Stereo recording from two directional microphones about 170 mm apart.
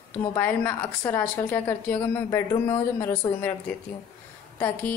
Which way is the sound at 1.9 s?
25° left (ahead or behind).